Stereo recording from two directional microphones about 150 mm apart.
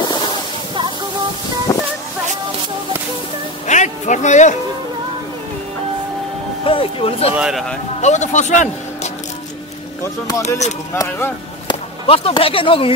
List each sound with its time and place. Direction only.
1.7 s a sound: 25° left (ahead or behind)
3.6 s a man's voice: 50° left (ahead or behind)
6.6 s speech: 35° left (ahead or behind)
7.3 s speech: 5° right (ahead or behind)
8.0 s speech: 50° left (ahead or behind)
11.0 s speech: 25° left (ahead or behind)
12.1 s speech: 40° left (ahead or behind)